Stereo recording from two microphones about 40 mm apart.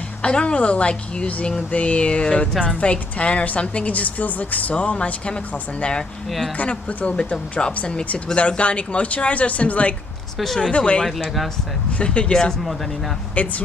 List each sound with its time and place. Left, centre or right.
0.2 s a woman's voice: left
6.5 s a woman's voice: left
7.2 s a woman's voice: left
12.0 s a woman's voice: left
13.3 s a woman's voice: left